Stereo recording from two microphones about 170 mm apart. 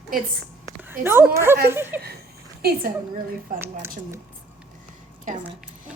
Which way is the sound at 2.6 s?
65° right (ahead or behind).